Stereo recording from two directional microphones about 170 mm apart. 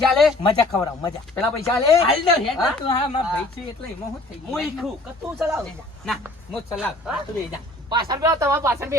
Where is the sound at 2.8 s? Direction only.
30° left (ahead or behind).